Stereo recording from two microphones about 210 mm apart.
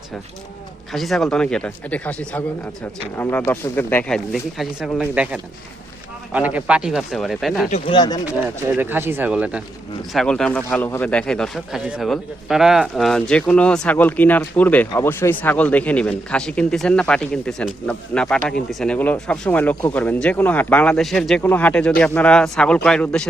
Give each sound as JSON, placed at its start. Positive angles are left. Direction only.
{"t": 0.9, "sound": "speech", "side_deg": 0}
{"t": 7.7, "sound": "speech", "side_deg": 25}
{"t": 8.8, "sound": "speech", "side_deg": -10}